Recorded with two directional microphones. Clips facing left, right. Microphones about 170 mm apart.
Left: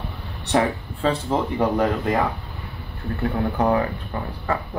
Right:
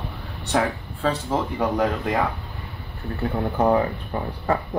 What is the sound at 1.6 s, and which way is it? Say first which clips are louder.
Speech: left 2 dB; centre (ahead or behind).